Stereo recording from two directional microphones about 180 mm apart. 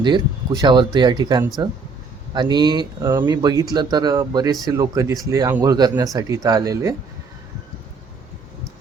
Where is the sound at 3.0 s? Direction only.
15° right (ahead or behind).